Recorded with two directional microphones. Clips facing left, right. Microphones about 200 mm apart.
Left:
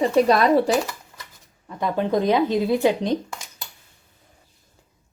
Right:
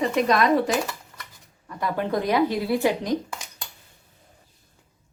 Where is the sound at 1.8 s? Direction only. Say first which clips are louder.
Left 4 dB; 20° left (ahead or behind).